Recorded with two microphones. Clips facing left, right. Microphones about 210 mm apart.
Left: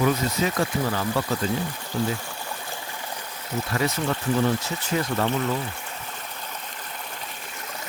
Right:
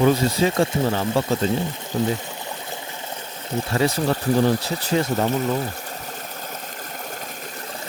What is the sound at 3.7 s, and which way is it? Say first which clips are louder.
Speech: right 5 dB; 30° right (ahead or behind).